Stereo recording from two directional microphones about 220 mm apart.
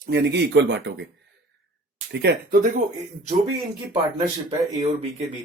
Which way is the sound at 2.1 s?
45° right (ahead or behind).